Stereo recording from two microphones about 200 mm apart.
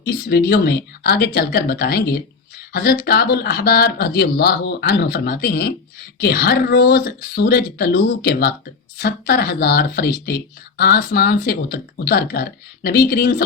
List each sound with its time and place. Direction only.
0.0 s speech: 55° left (ahead or behind)